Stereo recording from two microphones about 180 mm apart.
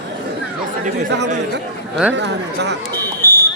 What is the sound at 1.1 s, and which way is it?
Speech, 75° right (ahead or behind).